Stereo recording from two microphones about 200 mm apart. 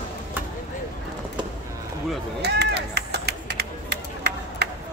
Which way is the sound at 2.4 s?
55° right (ahead or behind).